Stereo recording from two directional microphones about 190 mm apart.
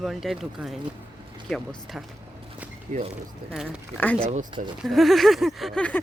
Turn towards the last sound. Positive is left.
turn(degrees=5)  # may be behind; listen again after turning